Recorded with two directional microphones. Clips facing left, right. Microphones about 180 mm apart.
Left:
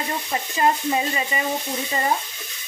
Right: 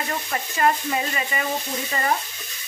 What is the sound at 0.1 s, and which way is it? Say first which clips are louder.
Stir: left 1 dB; 20° left (ahead or behind).